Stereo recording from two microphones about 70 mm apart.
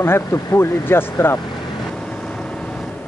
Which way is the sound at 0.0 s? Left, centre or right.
Left.